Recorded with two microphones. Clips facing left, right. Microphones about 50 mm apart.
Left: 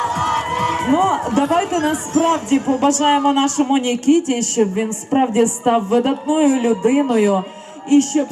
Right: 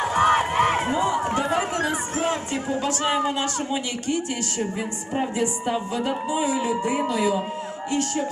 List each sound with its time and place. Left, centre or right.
0.0 s crowd: right
0.8 s a sound: left
1.4 s speech: left
4.6 s speech: left